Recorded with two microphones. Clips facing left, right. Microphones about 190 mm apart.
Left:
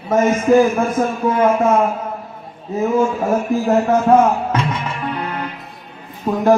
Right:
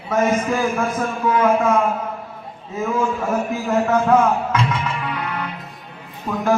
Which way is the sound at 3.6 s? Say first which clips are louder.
Left 3 dB; 30° left (ahead or behind).